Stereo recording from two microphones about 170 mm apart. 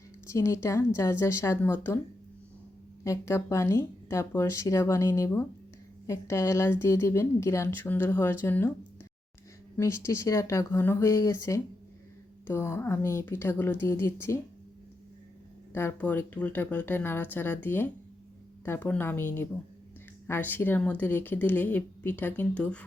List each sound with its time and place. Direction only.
0.3 s speech: 15° left (ahead or behind)
3.0 s speech: 15° left (ahead or behind)
9.7 s speech: 15° left (ahead or behind)
15.7 s speech: 15° left (ahead or behind)